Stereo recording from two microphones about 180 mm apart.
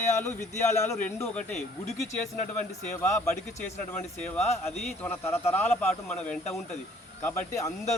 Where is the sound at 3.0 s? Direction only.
10° left (ahead or behind).